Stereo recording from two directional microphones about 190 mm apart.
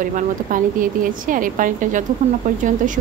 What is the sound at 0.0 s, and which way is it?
A woman's voice, 45° right (ahead or behind).